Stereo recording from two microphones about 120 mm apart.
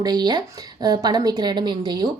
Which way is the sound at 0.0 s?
35° right (ahead or behind).